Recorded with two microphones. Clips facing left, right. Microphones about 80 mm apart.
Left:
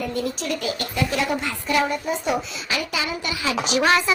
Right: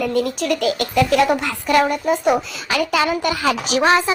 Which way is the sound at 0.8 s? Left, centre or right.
Right.